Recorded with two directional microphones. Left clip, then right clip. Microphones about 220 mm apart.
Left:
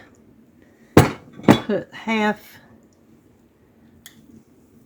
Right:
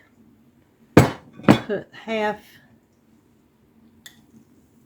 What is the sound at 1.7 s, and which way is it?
Speech, 50° left (ahead or behind).